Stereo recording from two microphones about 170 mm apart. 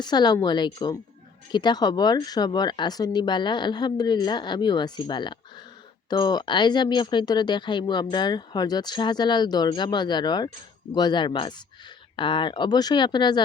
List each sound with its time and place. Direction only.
0.0 s speech: 25° left (ahead or behind)